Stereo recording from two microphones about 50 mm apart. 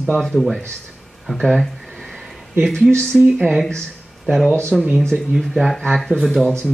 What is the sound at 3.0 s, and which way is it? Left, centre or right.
Speech, centre.